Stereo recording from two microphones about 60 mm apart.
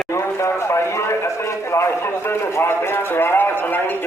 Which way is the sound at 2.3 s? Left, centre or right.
Left.